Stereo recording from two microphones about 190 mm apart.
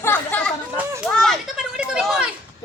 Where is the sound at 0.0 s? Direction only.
10° left (ahead or behind).